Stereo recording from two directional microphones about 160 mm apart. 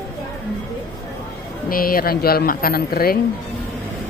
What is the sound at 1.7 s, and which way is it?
Speech, 65° left (ahead or behind).